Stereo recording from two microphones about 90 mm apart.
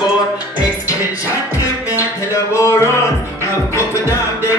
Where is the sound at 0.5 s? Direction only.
40° left (ahead or behind).